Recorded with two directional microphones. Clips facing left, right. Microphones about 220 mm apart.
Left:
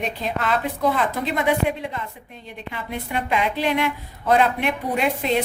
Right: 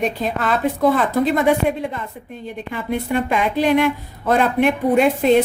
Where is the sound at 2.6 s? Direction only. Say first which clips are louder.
Right 7 dB; 50° right (ahead or behind).